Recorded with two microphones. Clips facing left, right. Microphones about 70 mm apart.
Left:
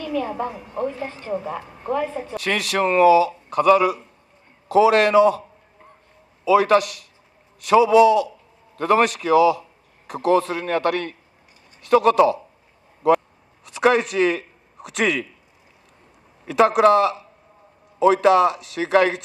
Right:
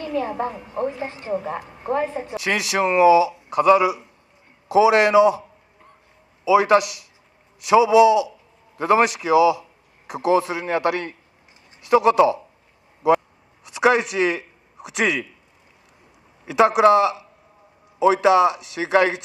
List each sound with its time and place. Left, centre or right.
0.2 s a woman's voice: centre
2.1 s a man's voice: centre
16.4 s a woman's voice: centre